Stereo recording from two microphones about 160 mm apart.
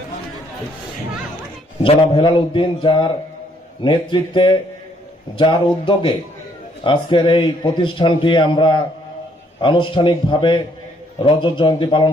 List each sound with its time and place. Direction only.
1.8 s a man's voice: 30° left (ahead or behind)
4.1 s a man's voice: 30° left (ahead or behind)